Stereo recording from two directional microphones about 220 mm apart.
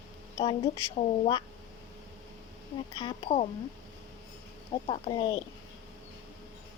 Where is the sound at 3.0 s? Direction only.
30° left (ahead or behind).